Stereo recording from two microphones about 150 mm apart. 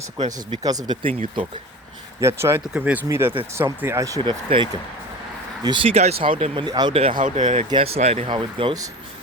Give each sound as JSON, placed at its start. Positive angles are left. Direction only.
{"t": 0.3, "sound": "speech", "side_deg": -25}
{"t": 2.2, "sound": "speech", "side_deg": -15}
{"t": 4.5, "sound": "speech", "side_deg": -35}
{"t": 6.7, "sound": "speech", "side_deg": -25}
{"t": 6.9, "sound": "speech", "side_deg": -40}
{"t": 7.2, "sound": "speech", "side_deg": -55}
{"t": 7.7, "sound": "speech", "side_deg": -40}